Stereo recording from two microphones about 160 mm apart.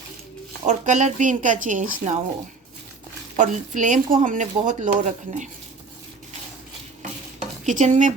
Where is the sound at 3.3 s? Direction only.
50° right (ahead or behind).